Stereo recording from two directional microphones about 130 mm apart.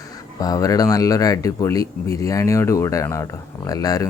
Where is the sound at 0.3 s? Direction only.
30° left (ahead or behind).